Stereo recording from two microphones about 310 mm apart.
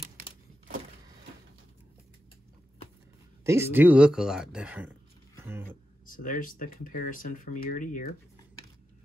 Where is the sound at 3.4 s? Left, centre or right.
Centre.